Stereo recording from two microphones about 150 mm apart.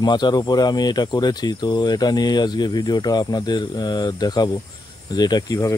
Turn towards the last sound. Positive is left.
turn(degrees=25)  # may be behind; listen again after turning